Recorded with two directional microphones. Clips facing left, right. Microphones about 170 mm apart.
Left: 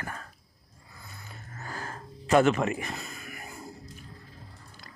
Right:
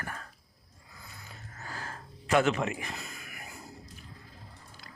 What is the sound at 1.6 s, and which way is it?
Gasp, 45° left (ahead or behind).